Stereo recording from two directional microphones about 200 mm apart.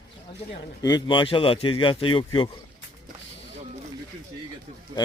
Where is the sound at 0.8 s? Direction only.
20° left (ahead or behind).